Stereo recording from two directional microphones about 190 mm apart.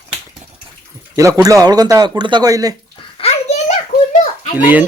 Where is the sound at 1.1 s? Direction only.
15° right (ahead or behind).